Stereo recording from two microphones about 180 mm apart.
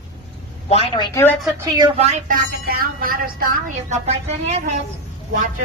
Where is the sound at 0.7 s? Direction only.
30° left (ahead or behind).